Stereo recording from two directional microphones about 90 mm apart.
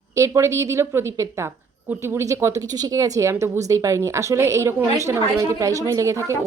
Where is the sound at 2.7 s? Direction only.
45° right (ahead or behind).